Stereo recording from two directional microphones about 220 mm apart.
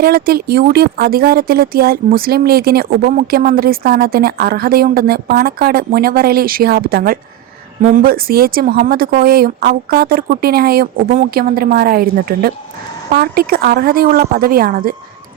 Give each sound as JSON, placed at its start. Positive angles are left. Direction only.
{"t": 0.0, "sound": "speech", "side_deg": -45}